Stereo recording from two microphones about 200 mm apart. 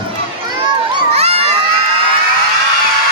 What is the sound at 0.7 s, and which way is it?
Children playing, 30° right (ahead or behind).